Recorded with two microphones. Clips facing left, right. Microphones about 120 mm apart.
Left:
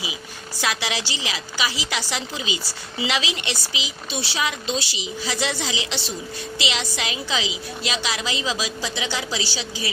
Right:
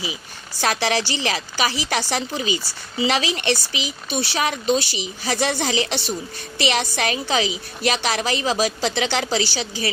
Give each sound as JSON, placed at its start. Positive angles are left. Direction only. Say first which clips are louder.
{"t": 0.6, "sound": "a woman's voice", "louder": "right 5 dB", "side_deg": -50}